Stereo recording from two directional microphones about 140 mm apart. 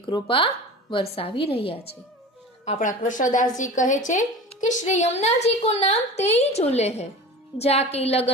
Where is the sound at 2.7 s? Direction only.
65° left (ahead or behind); by 8.3 s 45° left (ahead or behind).